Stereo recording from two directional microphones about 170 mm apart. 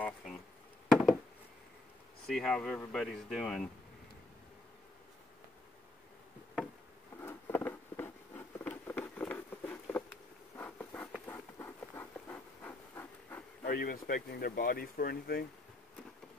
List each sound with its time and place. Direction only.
0.0 s bee: centre (ahead or behind)
2.2 s speech: centre (ahead or behind)
7.2 s a sound: 15° left (ahead or behind)
8.6 s patter: 10° left (ahead or behind)
10.6 s insect: 10° left (ahead or behind)
11.2 s a sound: 15° left (ahead or behind)
13.7 s speech: 60° left (ahead or behind)